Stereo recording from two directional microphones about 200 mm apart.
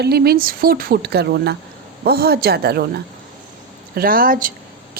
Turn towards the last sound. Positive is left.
turn(degrees=-45)  # may be behind; listen again after turning